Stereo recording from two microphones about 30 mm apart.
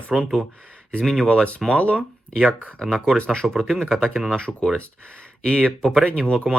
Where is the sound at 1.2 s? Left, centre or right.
Centre.